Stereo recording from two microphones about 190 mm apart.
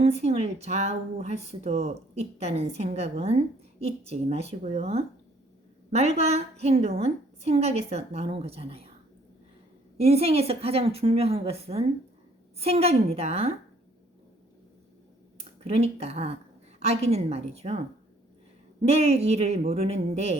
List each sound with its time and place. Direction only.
0.0 s a woman's voice: 35° right (ahead or behind)
10.0 s a woman's voice: 30° right (ahead or behind)
15.6 s a woman's voice: 35° right (ahead or behind)